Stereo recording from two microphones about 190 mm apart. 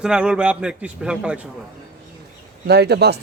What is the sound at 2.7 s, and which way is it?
Speech, 60° right (ahead or behind).